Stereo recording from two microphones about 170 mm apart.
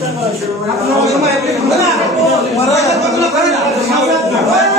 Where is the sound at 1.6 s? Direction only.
Centre (ahead or behind).